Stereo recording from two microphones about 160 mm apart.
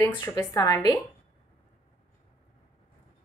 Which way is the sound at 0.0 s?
20° left (ahead or behind).